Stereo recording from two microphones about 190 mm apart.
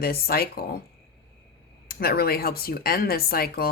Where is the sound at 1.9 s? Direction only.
55° left (ahead or behind).